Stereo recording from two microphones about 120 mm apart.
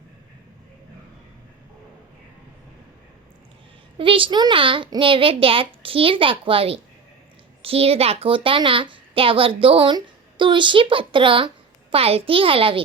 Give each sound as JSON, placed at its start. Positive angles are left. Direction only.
{"t": 3.9, "sound": "a woman's voice", "side_deg": -45}